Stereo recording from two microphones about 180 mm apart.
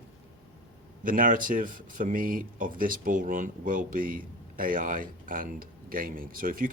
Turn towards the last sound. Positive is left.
turn(degrees=-50)  # may be behind; listen again after turning